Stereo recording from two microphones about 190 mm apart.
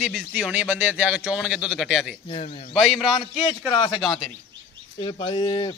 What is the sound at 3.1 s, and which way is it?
Speech, 30° left (ahead or behind).